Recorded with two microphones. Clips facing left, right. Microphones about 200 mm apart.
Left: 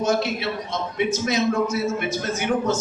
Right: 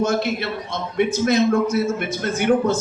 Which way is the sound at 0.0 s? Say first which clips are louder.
Right 2 dB; 55° right (ahead or behind).